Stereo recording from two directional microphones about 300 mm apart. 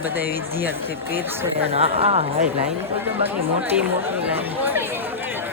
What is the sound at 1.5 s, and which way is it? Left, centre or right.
Speech, centre.